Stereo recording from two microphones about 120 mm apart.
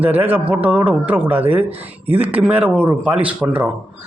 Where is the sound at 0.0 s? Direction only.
15° right (ahead or behind).